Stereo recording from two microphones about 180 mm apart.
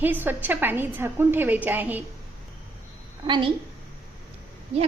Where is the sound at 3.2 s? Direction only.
25° right (ahead or behind).